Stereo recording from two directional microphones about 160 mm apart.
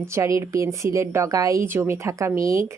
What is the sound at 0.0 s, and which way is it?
A woman's voice, 15° right (ahead or behind).